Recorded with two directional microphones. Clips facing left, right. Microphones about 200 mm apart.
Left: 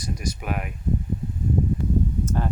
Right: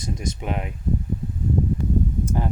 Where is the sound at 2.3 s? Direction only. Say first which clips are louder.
Right 1 dB; 15° right (ahead or behind).